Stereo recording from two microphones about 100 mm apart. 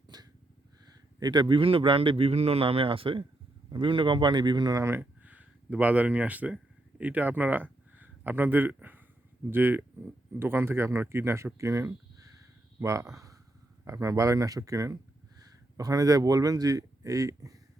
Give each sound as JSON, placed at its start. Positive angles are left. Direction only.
{"t": 0.1, "sound": "a sound", "side_deg": -40}
{"t": 0.9, "sound": "a man's voice", "side_deg": -45}
{"t": 4.8, "sound": "speech", "side_deg": -20}